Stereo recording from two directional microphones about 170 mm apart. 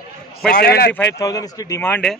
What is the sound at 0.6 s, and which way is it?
Speech, 70° left (ahead or behind).